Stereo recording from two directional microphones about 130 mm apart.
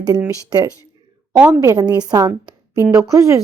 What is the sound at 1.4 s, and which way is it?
A woman's voice, 20° right (ahead or behind).